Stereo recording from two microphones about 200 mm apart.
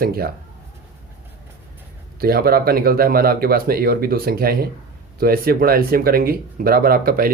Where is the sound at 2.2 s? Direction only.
50° right (ahead or behind).